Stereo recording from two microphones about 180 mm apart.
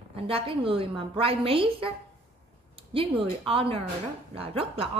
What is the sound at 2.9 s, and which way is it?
A woman's voice, 30° right (ahead or behind).